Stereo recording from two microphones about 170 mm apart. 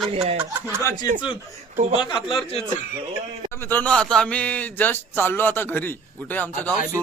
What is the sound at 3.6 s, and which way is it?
A man's voice, 10° left (ahead or behind).